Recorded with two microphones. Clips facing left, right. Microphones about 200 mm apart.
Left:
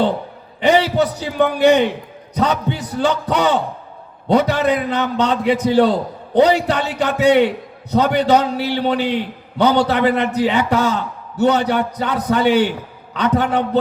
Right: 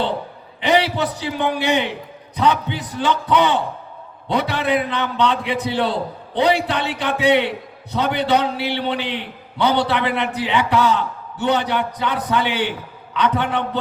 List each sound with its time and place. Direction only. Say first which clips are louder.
0.6 s a man's voice: left 4 dB; 45° left (ahead or behind)